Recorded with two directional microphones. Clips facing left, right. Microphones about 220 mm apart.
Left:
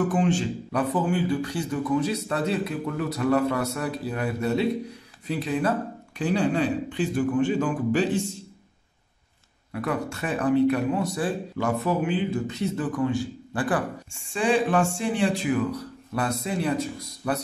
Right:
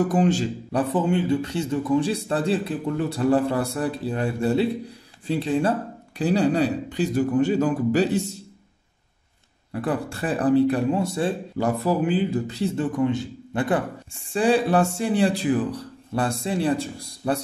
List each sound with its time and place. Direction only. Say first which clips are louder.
0.1 s speech: right 3 dB; 40° right (ahead or behind)
9.7 s speech: right 2 dB; 30° right (ahead or behind)
14.1 s speech: right 3 dB; 35° right (ahead or behind)